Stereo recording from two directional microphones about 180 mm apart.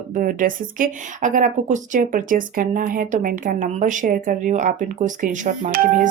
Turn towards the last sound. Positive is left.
turn(degrees=-50)  # may be behind; listen again after turning